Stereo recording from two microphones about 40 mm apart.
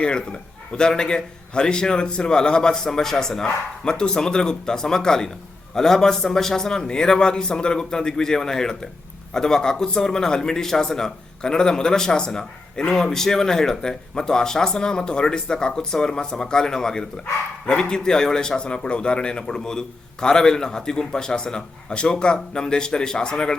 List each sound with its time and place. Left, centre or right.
0.0 s a man's voice: left